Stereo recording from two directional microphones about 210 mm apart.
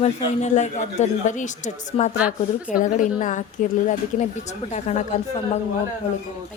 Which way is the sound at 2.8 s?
40° left (ahead or behind).